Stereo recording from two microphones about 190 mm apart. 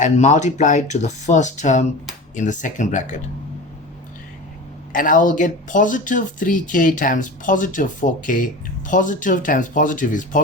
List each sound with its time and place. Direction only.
0.0 s speech: 40° left (ahead or behind)
4.9 s speech: 45° left (ahead or behind)